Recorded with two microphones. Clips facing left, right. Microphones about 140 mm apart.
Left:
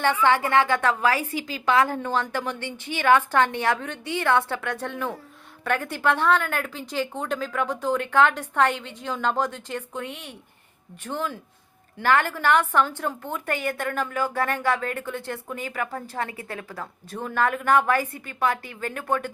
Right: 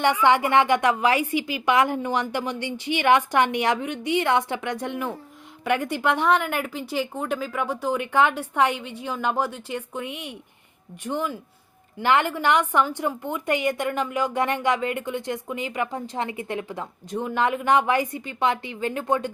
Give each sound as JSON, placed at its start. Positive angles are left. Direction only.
{"t": 0.0, "sound": "a woman's voice", "side_deg": -15}